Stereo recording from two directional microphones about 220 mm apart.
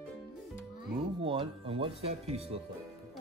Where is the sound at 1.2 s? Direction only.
25° right (ahead or behind).